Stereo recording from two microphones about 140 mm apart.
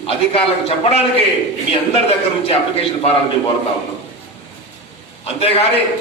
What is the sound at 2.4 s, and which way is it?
A man's voice, 45° left (ahead or behind).